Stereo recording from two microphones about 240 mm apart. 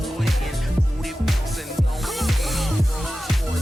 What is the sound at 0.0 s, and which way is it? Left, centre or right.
Music, centre.